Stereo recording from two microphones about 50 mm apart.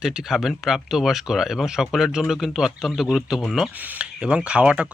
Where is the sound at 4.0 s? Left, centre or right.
Right.